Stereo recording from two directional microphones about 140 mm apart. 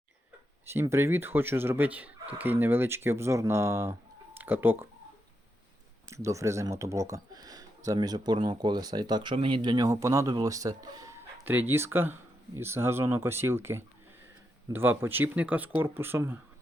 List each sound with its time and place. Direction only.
0.6 s speech: 20° right (ahead or behind)
6.1 s speech: 20° right (ahead or behind)